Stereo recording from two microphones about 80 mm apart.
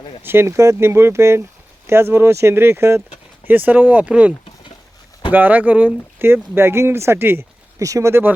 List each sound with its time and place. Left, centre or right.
0.2 s speech: right
7.8 s speech: right